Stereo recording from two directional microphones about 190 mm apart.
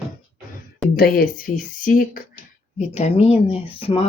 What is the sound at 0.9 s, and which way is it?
Speech, 50° left (ahead or behind).